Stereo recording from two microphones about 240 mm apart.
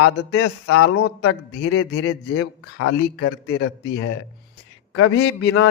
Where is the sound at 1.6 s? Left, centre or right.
Left.